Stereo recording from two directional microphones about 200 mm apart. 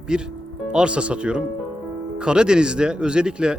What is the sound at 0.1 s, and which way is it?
Speech, 5° right (ahead or behind).